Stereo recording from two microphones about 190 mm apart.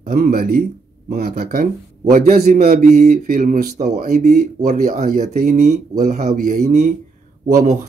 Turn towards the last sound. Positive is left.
turn(degrees=-45)  # may be behind; listen again after turning